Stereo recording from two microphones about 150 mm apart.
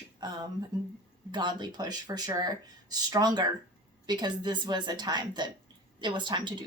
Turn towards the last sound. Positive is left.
turn(degrees=-30)  # may be behind; listen again after turning